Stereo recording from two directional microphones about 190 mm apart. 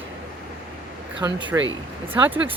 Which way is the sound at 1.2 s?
25° right (ahead or behind).